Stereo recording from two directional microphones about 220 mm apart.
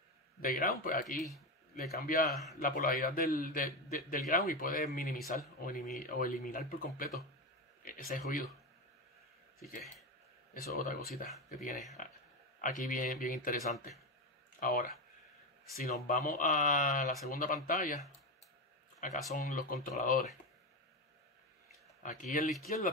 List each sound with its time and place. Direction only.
0.4 s a man's voice: 40° left (ahead or behind)
10.5 s speech: 40° left (ahead or behind)
12.5 s a man's voice: 35° left (ahead or behind)
19.3 s a man's voice: 35° left (ahead or behind)
22.0 s a man's voice: 35° left (ahead or behind)